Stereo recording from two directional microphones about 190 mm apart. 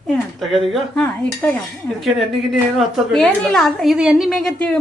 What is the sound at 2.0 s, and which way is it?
A woman's voice, centre (ahead or behind).